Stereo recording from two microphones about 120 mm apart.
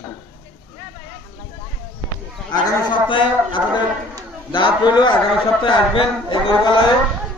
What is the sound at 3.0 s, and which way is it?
A man's voice, 45° left (ahead or behind).